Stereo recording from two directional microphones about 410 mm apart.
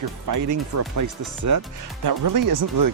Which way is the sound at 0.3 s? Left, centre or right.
Right.